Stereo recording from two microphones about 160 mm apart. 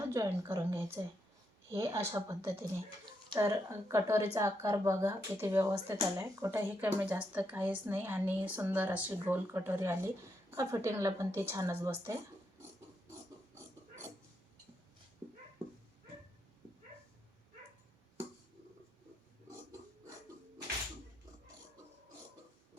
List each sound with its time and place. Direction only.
0.0 s speech: 20° right (ahead or behind)